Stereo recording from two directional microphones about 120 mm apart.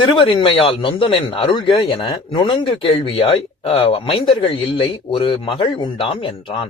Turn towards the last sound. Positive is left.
turn(degrees=45)  # may be behind; listen again after turning